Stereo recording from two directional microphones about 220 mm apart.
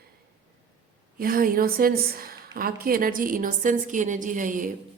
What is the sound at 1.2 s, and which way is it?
A woman's voice, 40° right (ahead or behind).